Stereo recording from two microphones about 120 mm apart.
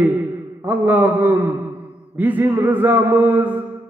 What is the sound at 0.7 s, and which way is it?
A man's voice, 15° right (ahead or behind).